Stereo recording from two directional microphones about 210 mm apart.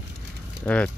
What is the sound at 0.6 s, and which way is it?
Speech, 5° left (ahead or behind).